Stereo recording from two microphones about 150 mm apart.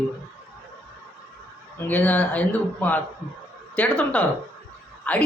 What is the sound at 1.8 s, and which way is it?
A woman's voice, 10° left (ahead or behind).